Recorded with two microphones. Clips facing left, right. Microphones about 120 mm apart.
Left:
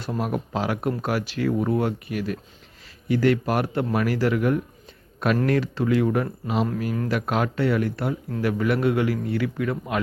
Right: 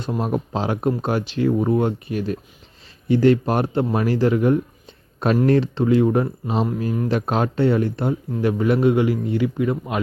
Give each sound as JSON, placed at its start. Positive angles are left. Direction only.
{"t": 0.0, "sound": "speech", "side_deg": -25}